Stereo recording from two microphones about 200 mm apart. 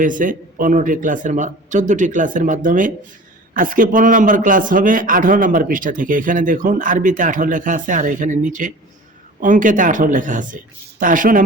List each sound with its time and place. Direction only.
0.0 s a man's voice: 40° right (ahead or behind)